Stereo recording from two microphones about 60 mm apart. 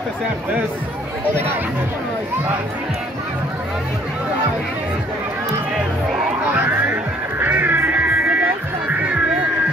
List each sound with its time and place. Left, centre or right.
6.4 s music: right
8.8 s music: centre